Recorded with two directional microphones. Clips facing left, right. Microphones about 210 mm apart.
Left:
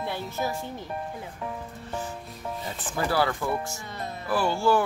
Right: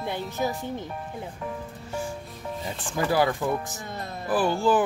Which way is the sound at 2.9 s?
15° right (ahead or behind).